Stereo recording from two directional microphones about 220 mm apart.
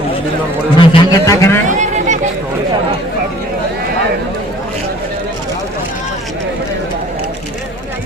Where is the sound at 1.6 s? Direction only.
35° right (ahead or behind).